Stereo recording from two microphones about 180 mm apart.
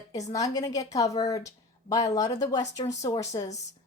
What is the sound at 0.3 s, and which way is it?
A woman's voice, 20° left (ahead or behind).